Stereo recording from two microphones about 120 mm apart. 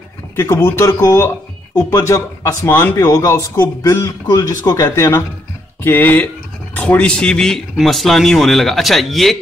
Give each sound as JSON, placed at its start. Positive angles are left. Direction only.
{"t": 0.4, "sound": "speech", "side_deg": 20}